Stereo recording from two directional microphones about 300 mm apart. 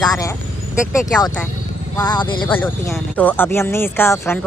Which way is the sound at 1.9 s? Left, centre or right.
Centre.